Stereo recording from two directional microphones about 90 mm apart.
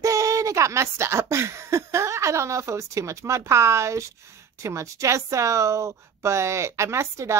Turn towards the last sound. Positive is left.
turn(degrees=-30)  # may be behind; listen again after turning